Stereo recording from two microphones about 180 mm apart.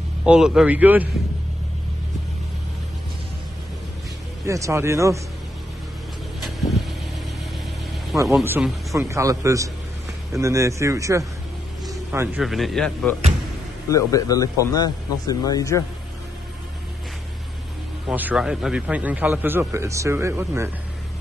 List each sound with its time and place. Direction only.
0.2 s a man's voice: 5° right (ahead or behind)
4.5 s a man's voice: 15° right (ahead or behind)
8.1 s a man's voice: 5° right (ahead or behind)
11.9 s vehicle: 15° right (ahead or behind)
12.4 s speech: centre (ahead or behind)
13.8 s speech: 20° left (ahead or behind)
18.0 s a man's voice: 5° right (ahead or behind)